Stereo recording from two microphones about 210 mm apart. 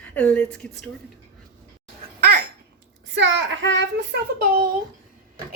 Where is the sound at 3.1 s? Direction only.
60° right (ahead or behind).